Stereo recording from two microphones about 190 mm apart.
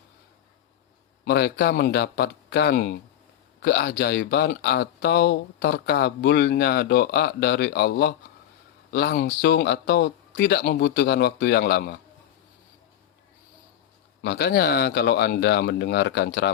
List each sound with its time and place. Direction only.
1.2 s speech: 60° left (ahead or behind)
14.2 s speech: 60° left (ahead or behind)